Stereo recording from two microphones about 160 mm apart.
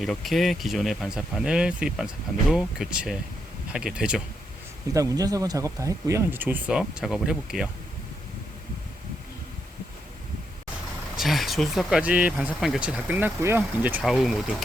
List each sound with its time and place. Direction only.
0.0 s speech: centre (ahead or behind)
4.9 s speech: 20° right (ahead or behind); by 7.7 s 5° right (ahead or behind)
11.2 s speech: centre (ahead or behind)